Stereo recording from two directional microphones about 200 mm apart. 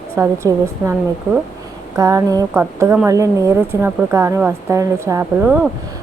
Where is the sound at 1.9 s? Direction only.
15° right (ahead or behind).